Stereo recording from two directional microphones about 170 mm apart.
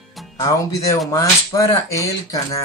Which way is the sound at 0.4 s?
20° left (ahead or behind).